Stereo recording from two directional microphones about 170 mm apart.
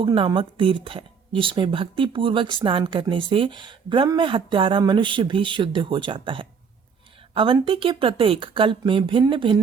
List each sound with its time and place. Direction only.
0.0 s speech: 30° right (ahead or behind)